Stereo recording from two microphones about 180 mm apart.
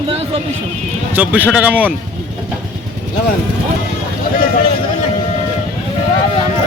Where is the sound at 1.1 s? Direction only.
10° right (ahead or behind).